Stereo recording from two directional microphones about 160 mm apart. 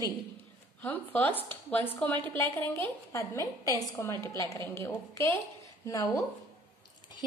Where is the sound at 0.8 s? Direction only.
10° left (ahead or behind).